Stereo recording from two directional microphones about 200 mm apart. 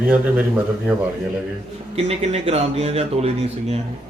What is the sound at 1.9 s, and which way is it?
Speech, 30° right (ahead or behind).